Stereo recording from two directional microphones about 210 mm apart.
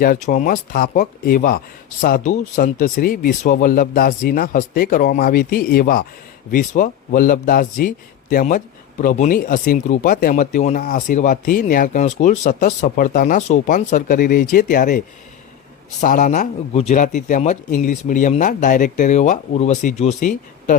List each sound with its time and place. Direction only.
0.0 s a man's voice: 40° left (ahead or behind)